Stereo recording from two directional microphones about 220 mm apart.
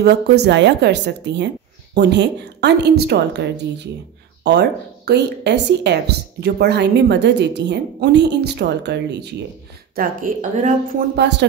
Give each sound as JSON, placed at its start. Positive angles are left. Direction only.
{"t": 0.0, "sound": "speech", "side_deg": -50}
{"t": 9.9, "sound": "a woman's voice", "side_deg": -40}